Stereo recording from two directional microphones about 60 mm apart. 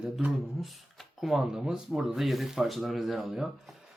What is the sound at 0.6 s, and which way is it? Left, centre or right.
Speech, centre.